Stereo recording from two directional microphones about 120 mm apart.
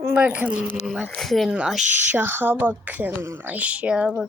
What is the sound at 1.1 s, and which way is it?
Speech, centre (ahead or behind).